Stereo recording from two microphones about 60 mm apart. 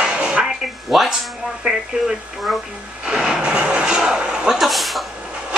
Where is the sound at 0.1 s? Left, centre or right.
Centre.